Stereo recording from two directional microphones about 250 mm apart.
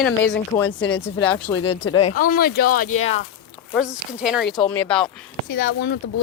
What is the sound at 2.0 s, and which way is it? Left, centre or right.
Speech, left.